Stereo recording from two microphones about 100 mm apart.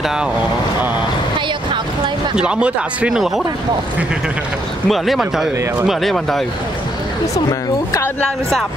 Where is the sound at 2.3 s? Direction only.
10° right (ahead or behind).